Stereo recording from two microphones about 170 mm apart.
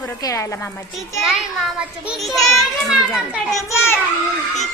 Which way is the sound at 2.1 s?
Centre (ahead or behind).